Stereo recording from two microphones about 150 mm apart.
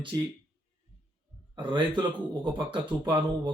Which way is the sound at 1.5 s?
30° right (ahead or behind).